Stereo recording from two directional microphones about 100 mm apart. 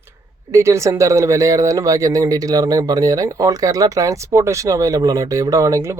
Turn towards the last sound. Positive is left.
turn(degrees=-30)  # may be behind; listen again after turning